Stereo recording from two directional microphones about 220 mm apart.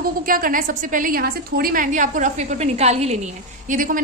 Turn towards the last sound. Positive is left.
turn(degrees=-35)  # may be behind; listen again after turning